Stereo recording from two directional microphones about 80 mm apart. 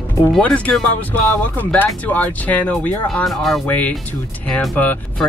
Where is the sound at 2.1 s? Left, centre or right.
Centre.